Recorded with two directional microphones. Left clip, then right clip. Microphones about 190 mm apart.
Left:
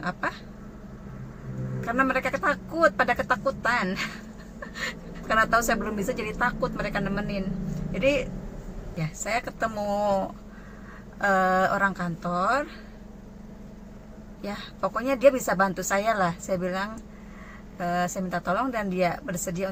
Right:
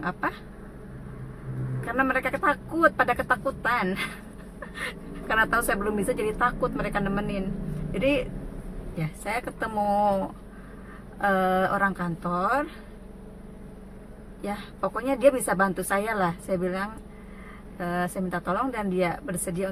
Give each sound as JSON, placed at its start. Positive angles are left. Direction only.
{"t": 0.0, "sound": "a woman's voice", "side_deg": -15}
{"t": 2.0, "sound": "a woman's voice", "side_deg": -15}
{"t": 4.8, "sound": "pant", "side_deg": -15}
{"t": 6.4, "sound": "a woman's voice", "side_deg": -15}
{"t": 14.4, "sound": "a woman's voice", "side_deg": -15}